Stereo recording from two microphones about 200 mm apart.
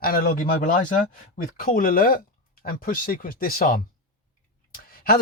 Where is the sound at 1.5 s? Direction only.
45° left (ahead or behind).